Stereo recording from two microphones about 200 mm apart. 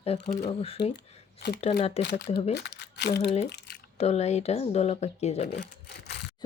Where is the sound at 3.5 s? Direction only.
50° left (ahead or behind).